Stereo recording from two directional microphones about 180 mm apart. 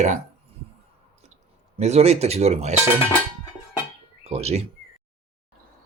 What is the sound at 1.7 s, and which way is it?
Speech, 35° right (ahead or behind).